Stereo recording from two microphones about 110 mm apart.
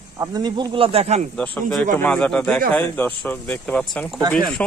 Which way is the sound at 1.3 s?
10° left (ahead or behind).